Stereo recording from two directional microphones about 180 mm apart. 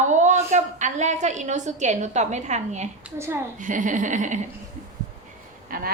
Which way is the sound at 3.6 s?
45° right (ahead or behind).